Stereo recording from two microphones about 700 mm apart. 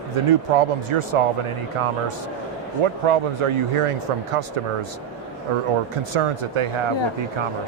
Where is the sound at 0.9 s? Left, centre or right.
Right.